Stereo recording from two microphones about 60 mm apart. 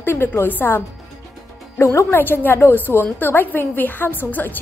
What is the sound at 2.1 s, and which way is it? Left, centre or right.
A woman's voice, left.